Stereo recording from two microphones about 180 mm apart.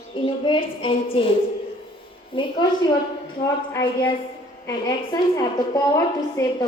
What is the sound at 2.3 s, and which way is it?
Speech, 25° left (ahead or behind).